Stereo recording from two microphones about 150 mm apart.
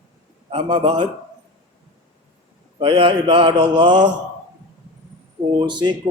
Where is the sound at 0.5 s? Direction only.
35° right (ahead or behind).